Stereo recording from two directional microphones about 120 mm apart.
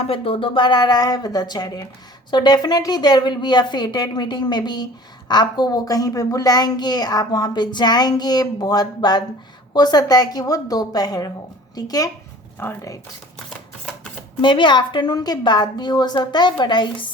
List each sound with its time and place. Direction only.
0.1 s a child's voice: 50° left (ahead or behind); by 13.0 s 25° left (ahead or behind)
14.4 s a child's voice: 40° left (ahead or behind)